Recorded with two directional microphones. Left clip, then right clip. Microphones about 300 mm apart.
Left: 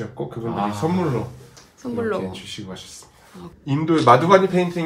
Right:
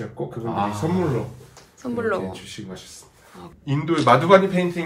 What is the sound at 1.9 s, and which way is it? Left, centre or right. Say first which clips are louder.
Speech: even; centre.